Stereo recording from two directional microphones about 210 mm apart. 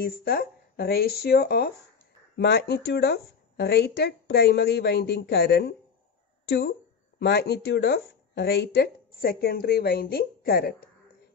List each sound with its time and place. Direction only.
0.0 s speech: 50° left (ahead or behind)
7.2 s speech: 50° left (ahead or behind)